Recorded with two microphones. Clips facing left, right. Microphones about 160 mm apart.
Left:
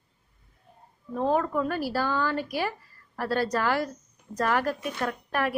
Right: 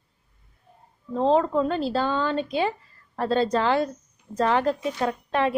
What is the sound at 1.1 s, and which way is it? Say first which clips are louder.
A woman's voice: right 5 dB; 25° right (ahead or behind).